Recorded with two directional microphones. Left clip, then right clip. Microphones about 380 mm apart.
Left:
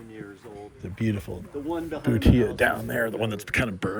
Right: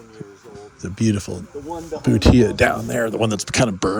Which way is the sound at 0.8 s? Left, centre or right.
Centre.